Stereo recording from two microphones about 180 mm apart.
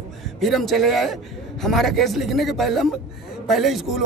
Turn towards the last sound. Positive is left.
turn(degrees=0)  # may be behind; listen again after turning